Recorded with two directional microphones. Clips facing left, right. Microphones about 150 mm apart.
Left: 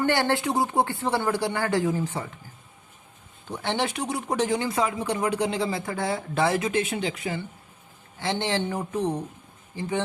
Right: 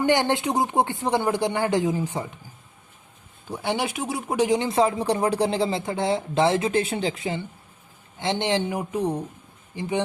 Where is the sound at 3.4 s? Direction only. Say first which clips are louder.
Right 1 dB; 10° right (ahead or behind).